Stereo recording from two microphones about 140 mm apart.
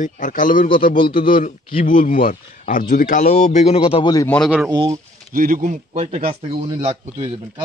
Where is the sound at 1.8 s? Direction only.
80° left; by 4.0 s 45° left (ahead or behind).